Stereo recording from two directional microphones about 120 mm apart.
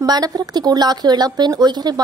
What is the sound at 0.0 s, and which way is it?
A woman's voice, 35° right (ahead or behind).